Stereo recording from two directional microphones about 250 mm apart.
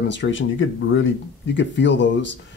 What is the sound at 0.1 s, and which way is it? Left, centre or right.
A man's voice, left.